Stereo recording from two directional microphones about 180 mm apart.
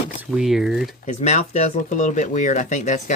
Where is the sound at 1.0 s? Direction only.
40° left (ahead or behind).